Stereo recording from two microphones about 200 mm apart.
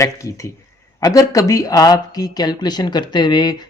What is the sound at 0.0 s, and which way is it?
Speech, 15° left (ahead or behind).